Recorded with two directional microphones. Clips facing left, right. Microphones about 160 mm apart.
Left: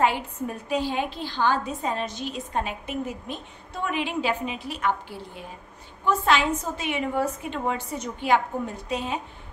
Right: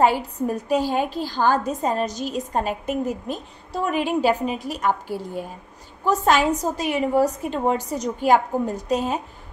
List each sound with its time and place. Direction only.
0.0 s a woman's voice: 40° right (ahead or behind)